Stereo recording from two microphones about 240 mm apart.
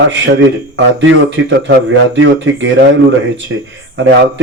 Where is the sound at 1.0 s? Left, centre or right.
Right.